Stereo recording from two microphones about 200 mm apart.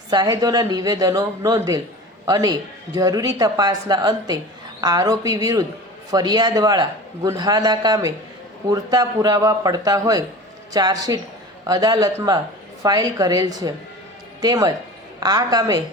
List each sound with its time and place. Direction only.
0.1 s a man's voice: 20° right (ahead or behind)